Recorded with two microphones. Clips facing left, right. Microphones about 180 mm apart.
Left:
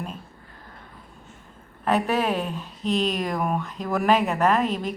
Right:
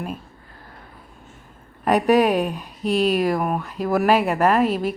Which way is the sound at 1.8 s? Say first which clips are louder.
Right 6 dB; 15° right (ahead or behind).